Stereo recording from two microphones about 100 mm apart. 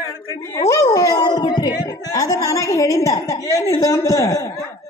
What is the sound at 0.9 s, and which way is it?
Music, 40° left (ahead or behind).